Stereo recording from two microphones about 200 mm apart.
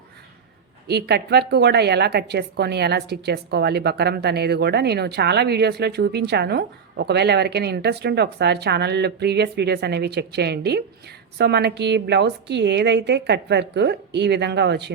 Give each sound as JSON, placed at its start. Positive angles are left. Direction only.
{"t": 0.9, "sound": "a woman's voice", "side_deg": -55}